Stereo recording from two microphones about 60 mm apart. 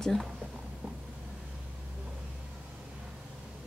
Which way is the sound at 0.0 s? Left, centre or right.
Centre.